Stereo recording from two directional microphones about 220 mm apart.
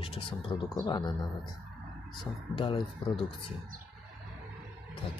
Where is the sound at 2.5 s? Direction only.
20° left (ahead or behind).